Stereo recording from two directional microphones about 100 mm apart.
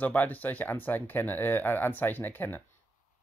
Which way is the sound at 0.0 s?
15° left (ahead or behind).